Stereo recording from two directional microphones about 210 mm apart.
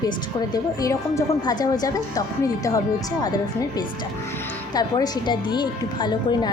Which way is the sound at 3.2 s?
20° left (ahead or behind).